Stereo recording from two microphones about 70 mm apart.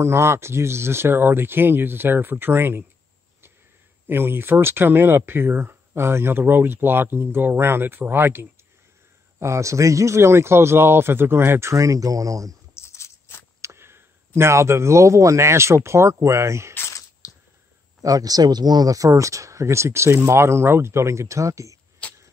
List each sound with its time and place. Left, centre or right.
0.0 s speech: right
4.1 s speech: right
9.4 s speech: right
11.7 s speech: right
12.7 s a sound: left
13.6 s speech: right
16.9 s a sound: left
18.0 s speech: right
22.0 s vehicle: centre